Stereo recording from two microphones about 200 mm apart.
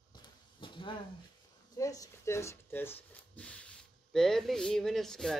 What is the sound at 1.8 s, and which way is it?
Speech, 15° left (ahead or behind).